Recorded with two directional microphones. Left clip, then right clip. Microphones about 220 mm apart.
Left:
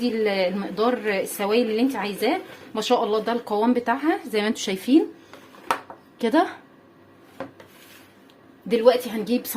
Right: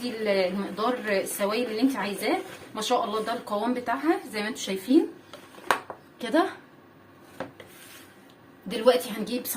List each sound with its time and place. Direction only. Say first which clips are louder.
0.3 s speech: left 2 dB; 45° left (ahead or behind)
6.1 s a woman's voice: left 4 dB; 40° left (ahead or behind)
8.6 s a woman's voice: left 4 dB; 40° left (ahead or behind)